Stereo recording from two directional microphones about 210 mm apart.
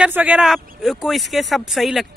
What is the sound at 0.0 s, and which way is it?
Speech, 5° right (ahead or behind).